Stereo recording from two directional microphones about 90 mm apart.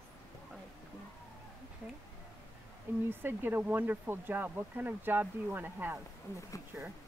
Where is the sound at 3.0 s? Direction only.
25° right (ahead or behind).